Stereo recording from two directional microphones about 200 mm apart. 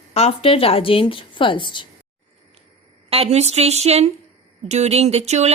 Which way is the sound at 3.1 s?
30° right (ahead or behind).